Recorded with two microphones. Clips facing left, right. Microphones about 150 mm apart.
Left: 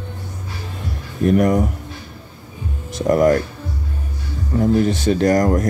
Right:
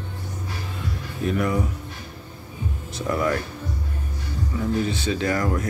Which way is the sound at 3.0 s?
45° left (ahead or behind).